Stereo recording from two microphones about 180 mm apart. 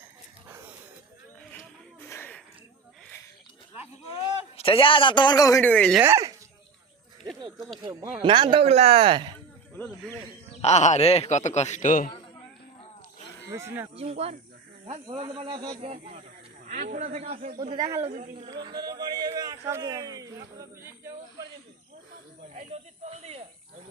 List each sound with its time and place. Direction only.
1.5 s a sound: 15° left (ahead or behind)
4.1 s a man's voice: 30° left (ahead or behind); by 6.0 s 10° left (ahead or behind)
6.0 s speech: 15° right (ahead or behind)
7.5 s speech: centre (ahead or behind)
7.9 s speech: 25° right (ahead or behind)
9.7 s speech: 5° left (ahead or behind)
10.6 s speech: 40° left (ahead or behind)
13.5 s speech: 15° right (ahead or behind)
13.9 s a man's voice: 35° right (ahead or behind)
15.9 s a man's voice: 40° right (ahead or behind)
17.6 s speech: 20° right (ahead or behind)
18.0 s a man's voice: 40° right (ahead or behind)
18.4 s speech: 25° right (ahead or behind)
22.5 s a man's voice: 35° right (ahead or behind)